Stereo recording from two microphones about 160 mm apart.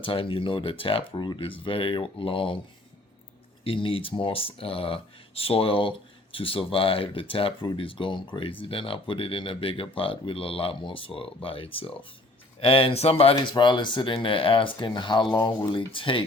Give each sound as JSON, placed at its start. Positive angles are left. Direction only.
{"t": 0.0, "sound": "speech", "side_deg": 35}
{"t": 3.6, "sound": "speech", "side_deg": 35}